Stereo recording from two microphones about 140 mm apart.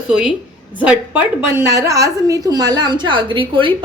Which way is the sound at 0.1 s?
5° right (ahead or behind).